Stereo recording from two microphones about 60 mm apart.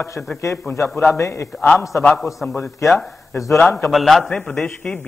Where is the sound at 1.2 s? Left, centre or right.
Left.